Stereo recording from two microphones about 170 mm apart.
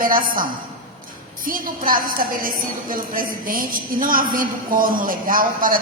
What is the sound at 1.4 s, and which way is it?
A woman's voice, 55° right (ahead or behind).